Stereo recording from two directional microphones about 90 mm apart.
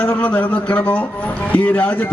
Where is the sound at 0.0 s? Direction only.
15° left (ahead or behind).